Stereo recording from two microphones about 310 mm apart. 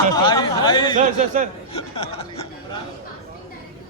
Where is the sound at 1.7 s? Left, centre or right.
Centre.